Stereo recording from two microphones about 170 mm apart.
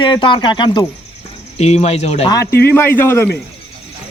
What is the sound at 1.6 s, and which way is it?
Speech, 40° left (ahead or behind).